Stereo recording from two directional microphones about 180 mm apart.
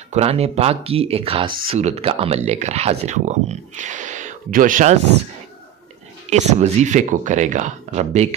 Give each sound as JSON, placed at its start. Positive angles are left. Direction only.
{"t": 0.1, "sound": "speech", "side_deg": -35}
{"t": 6.3, "sound": "speech", "side_deg": -40}